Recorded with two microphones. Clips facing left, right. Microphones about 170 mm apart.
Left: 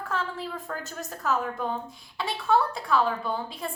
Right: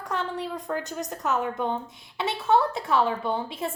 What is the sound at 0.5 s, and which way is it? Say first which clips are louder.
Speech: right 5 dB; 15° right (ahead or behind).